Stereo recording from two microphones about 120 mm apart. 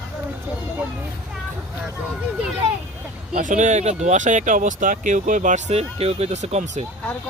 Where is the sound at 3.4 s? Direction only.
90° right; by 6.8 s 70° right (ahead or behind).